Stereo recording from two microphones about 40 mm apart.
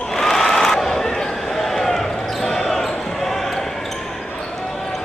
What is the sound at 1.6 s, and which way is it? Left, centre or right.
Basketball bounce, centre.